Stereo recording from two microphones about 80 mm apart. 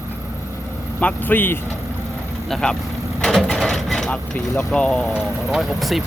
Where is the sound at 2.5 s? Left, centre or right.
Centre.